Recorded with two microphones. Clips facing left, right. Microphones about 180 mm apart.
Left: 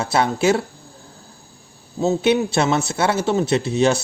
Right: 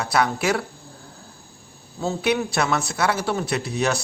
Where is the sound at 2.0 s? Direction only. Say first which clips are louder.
Left 5 dB; 25° left (ahead or behind).